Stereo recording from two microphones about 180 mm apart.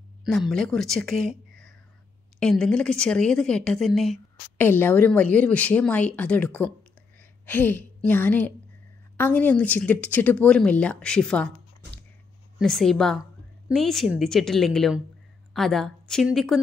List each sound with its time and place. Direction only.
0.2 s a woman's voice: centre (ahead or behind)
4.6 s a woman's voice: 10° left (ahead or behind)
12.5 s a woman's voice: centre (ahead or behind)